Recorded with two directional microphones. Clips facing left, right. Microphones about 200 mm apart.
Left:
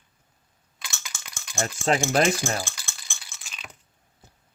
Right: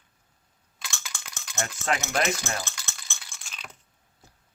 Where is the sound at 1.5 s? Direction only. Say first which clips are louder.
Left 5 dB; 30° left (ahead or behind).